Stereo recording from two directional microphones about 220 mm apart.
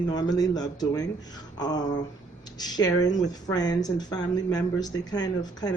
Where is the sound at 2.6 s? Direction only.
15° left (ahead or behind).